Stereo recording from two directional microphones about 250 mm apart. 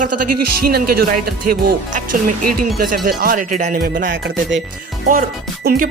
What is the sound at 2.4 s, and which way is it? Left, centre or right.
Speech, right.